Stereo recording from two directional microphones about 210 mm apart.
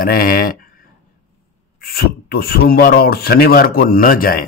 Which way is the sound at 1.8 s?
45° left (ahead or behind).